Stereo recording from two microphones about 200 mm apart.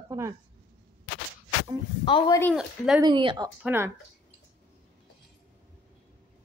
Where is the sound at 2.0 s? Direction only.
25° left (ahead or behind).